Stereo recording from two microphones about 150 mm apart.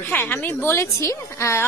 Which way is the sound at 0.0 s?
15° left (ahead or behind).